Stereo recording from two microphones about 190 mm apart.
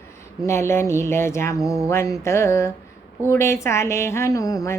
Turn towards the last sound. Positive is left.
turn(degrees=15)  # may be behind; listen again after turning